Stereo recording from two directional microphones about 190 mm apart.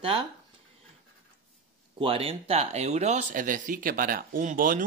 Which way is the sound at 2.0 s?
30° right (ahead or behind).